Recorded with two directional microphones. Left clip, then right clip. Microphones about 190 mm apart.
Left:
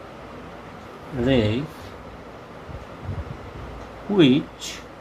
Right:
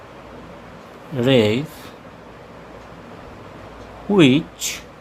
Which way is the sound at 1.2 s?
40° right (ahead or behind).